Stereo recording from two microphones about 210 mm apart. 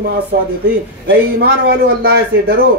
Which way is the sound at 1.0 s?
50° right (ahead or behind).